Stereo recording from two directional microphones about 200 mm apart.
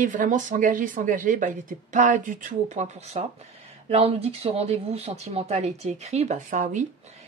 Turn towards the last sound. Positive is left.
turn(degrees=-40)  # may be behind; listen again after turning